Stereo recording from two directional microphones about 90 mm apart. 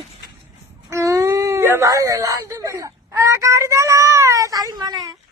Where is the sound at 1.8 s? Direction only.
40° right (ahead or behind).